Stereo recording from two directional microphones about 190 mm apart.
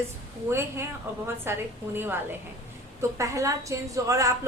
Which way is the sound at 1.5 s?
10° right (ahead or behind).